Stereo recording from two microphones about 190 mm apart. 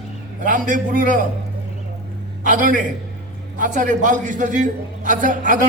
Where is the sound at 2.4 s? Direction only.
45° right (ahead or behind).